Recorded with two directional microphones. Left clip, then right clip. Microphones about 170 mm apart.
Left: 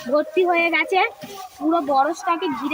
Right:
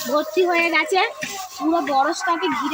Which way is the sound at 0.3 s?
15° left (ahead or behind).